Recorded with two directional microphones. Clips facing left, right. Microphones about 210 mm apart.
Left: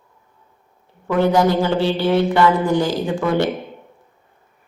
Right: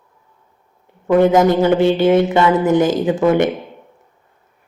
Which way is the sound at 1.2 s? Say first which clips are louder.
Right 3 dB; 20° right (ahead or behind).